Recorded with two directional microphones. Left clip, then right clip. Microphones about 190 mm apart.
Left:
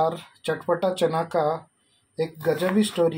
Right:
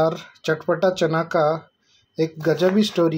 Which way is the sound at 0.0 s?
35° right (ahead or behind).